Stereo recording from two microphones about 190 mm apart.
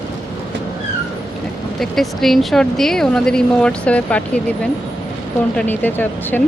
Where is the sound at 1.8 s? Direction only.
Centre (ahead or behind).